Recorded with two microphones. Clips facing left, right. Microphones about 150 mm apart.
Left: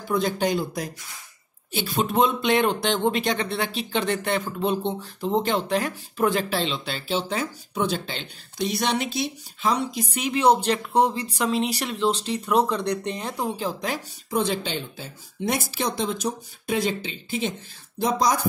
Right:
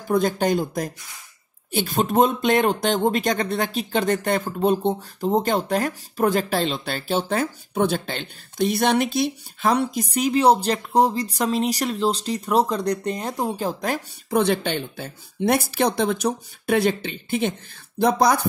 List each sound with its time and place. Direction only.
0.1 s speech: 45° right (ahead or behind)